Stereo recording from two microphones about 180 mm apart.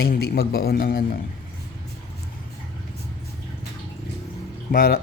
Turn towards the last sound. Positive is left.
turn(degrees=55)  # may be behind; listen again after turning